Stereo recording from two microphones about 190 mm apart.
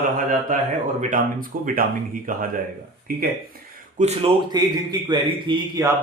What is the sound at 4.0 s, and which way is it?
Speech, 35° right (ahead or behind).